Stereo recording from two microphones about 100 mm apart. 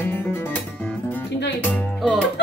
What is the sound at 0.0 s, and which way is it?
Music, 25° left (ahead or behind).